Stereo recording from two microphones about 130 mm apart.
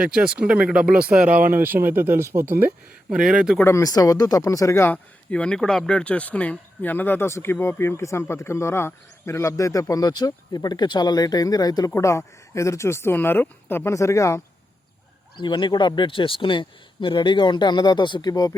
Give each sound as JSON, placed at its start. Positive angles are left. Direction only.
{"t": 0.0, "sound": "a man's voice", "side_deg": -5}
{"t": 3.6, "sound": "speech", "side_deg": 20}
{"t": 5.3, "sound": "speech", "side_deg": 5}
{"t": 15.4, "sound": "speech", "side_deg": 35}